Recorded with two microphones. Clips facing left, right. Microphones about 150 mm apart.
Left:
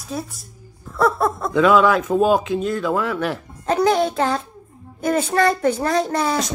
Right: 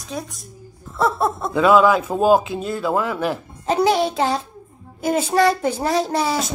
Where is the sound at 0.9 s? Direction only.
25° right (ahead or behind).